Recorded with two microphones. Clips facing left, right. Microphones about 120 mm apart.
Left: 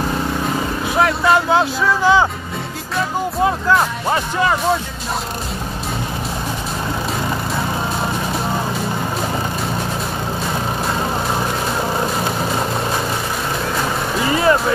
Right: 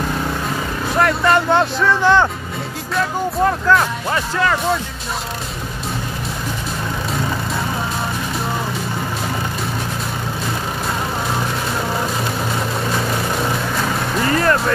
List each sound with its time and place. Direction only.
0.9 s speech: 5° left (ahead or behind)
3.4 s speech: 10° left (ahead or behind)
14.2 s vehicle: 5° left (ahead or behind)